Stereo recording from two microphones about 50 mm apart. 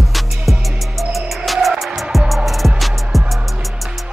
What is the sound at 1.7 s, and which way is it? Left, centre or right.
Music, centre.